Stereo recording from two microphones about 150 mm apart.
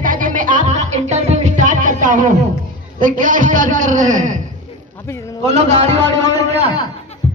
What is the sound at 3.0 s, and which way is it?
A man's voice, 60° right (ahead or behind).